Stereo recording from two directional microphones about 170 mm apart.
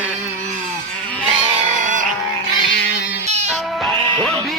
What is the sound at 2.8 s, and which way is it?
Music, 90° left.